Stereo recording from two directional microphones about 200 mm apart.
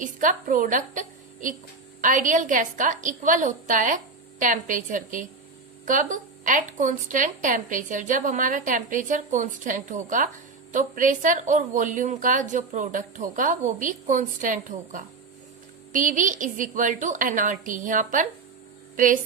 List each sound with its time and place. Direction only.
0.0 s a woman's voice: 40° right (ahead or behind)